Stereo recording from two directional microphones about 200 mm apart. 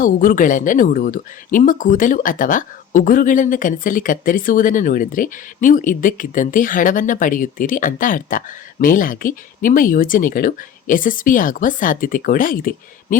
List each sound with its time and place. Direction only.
0.0 s speech: 45° left (ahead or behind)